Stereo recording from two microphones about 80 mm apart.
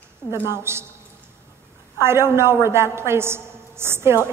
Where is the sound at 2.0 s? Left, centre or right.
Right.